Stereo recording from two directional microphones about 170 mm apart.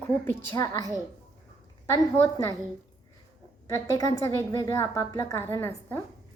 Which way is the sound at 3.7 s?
20° left (ahead or behind).